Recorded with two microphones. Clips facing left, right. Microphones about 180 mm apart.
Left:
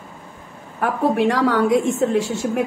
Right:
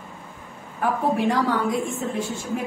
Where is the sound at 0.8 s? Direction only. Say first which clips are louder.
Left 4 dB; 75° left (ahead or behind).